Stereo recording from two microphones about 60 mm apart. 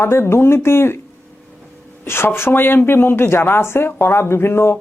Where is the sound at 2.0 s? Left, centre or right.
Left.